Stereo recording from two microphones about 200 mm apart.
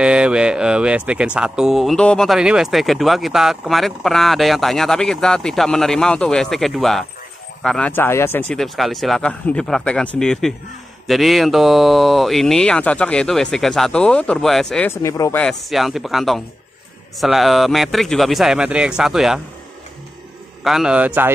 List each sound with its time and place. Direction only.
0.0 s speech: 5° right (ahead or behind); by 15.4 s 15° left (ahead or behind)
15.4 s speech: centre (ahead or behind)
20.6 s speech: 5° right (ahead or behind)